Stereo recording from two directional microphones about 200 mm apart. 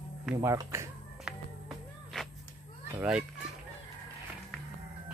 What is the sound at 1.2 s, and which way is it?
Music, centre (ahead or behind).